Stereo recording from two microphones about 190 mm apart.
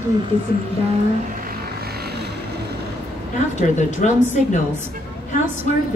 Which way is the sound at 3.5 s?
40° left (ahead or behind).